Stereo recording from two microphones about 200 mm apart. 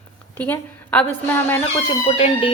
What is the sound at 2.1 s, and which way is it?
Music, 30° left (ahead or behind).